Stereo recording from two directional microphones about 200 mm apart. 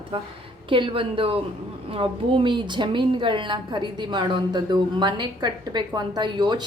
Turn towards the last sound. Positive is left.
turn(degrees=-20)  # may be behind; listen again after turning